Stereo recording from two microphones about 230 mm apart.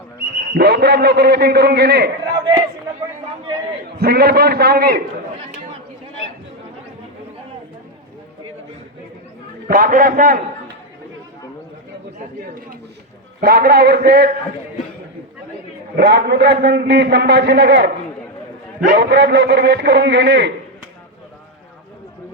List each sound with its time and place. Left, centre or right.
0.3 s a man's voice: right
3.9 s a man's voice: right
9.6 s a man's voice: right
13.4 s a man's voice: right
16.0 s a man's voice: right